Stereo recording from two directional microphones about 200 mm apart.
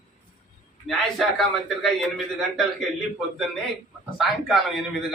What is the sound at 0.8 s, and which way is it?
A man's voice, centre (ahead or behind).